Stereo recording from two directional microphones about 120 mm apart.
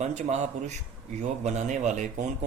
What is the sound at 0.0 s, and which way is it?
Speech, 75° right (ahead or behind).